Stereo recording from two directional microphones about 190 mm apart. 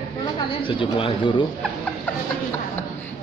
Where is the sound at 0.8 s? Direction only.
25° left (ahead or behind).